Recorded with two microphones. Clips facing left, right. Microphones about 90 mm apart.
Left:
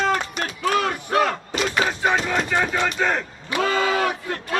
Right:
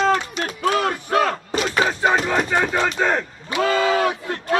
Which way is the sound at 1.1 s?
30° right (ahead or behind).